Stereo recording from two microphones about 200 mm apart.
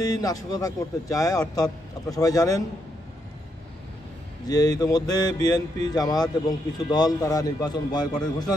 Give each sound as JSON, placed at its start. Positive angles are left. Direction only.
{"t": 0.0, "sound": "speech", "side_deg": 20}
{"t": 4.5, "sound": "speech", "side_deg": 20}